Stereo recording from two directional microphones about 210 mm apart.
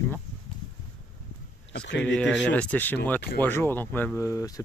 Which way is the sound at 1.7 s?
55° left (ahead or behind).